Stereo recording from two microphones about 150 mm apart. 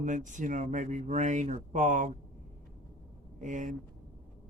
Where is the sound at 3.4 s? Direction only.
55° right (ahead or behind).